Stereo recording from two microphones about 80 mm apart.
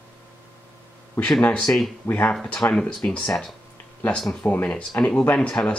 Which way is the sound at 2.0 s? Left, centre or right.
Left.